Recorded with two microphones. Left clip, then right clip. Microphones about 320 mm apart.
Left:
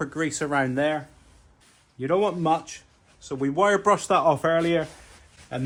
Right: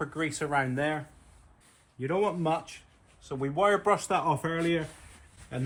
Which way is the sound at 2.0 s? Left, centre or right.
Left.